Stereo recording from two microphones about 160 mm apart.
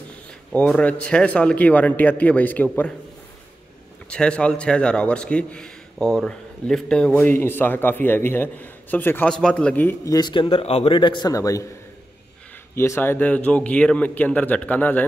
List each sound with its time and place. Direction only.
0.5 s a man's voice: 5° left (ahead or behind)
4.1 s a man's voice: 5° left (ahead or behind)
10.1 s a man's voice: 30° left (ahead or behind)
12.7 s a man's voice: 15° left (ahead or behind)